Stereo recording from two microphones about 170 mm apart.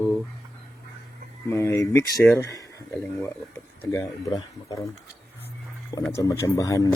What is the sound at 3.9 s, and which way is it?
Speech, 20° left (ahead or behind).